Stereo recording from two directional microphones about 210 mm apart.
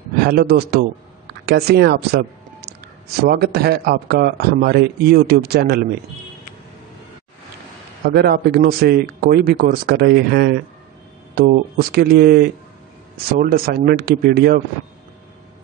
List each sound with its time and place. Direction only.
0.2 s a man's voice: 50° right (ahead or behind)
8.0 s a man's voice: 50° right (ahead or behind)